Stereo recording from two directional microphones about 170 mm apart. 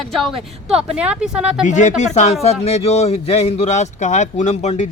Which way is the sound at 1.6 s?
45° left (ahead or behind).